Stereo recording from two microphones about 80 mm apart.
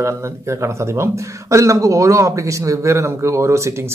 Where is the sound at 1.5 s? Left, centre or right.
Right.